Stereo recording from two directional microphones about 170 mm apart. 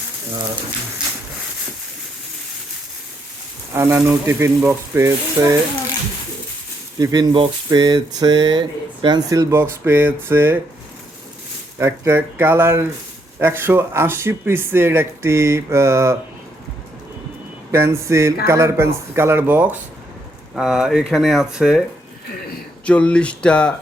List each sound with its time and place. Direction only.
3.8 s speech: 15° right (ahead or behind)
7.0 s speech: 25° right (ahead or behind)
11.8 s speech: 15° right (ahead or behind)
17.7 s speech: 15° right (ahead or behind)
22.9 s speech: 5° left (ahead or behind)